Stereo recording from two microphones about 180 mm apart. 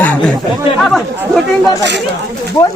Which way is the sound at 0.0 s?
5° left (ahead or behind).